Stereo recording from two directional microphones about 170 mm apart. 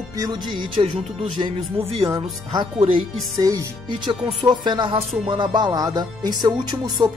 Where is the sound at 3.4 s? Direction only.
20° right (ahead or behind).